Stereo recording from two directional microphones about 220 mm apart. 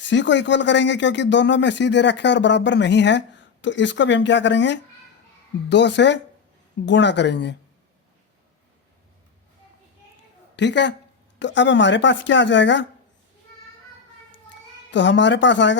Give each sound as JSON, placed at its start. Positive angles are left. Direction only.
{"t": 0.0, "sound": "speech", "side_deg": 55}
{"t": 10.5, "sound": "a woman's voice", "side_deg": 55}
{"t": 14.8, "sound": "a woman's voice", "side_deg": 55}